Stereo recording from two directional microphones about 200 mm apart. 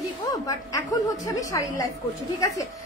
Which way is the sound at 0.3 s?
15° left (ahead or behind).